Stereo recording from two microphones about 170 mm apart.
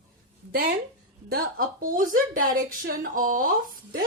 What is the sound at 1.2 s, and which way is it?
A woman's voice, 60° right (ahead or behind).